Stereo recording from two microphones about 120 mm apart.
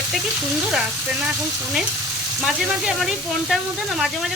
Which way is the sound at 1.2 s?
5° right (ahead or behind).